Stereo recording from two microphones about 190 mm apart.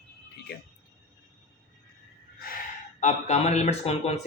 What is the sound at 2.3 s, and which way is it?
Chicken, 50° left (ahead or behind).